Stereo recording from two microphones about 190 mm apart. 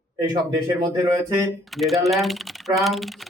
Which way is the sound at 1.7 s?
Centre (ahead or behind).